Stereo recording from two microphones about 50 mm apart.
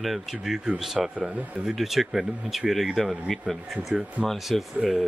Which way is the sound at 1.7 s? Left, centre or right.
Centre.